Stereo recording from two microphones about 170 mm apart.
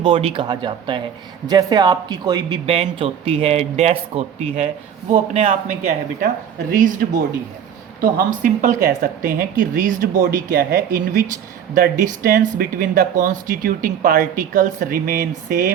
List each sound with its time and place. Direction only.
0.0 s speech: 30° right (ahead or behind)
6.1 s speech: 55° right (ahead or behind)